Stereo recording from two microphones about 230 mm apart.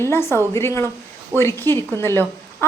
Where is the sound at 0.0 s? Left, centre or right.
Centre.